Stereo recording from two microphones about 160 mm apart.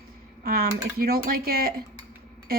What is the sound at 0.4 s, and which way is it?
A woman's voice, 70° right (ahead or behind).